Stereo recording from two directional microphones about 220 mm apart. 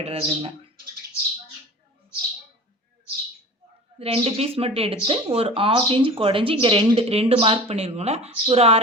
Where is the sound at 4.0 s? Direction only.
25° right (ahead or behind).